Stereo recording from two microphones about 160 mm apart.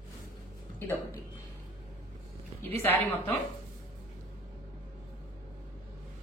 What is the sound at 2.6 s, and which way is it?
Speech, 15° left (ahead or behind).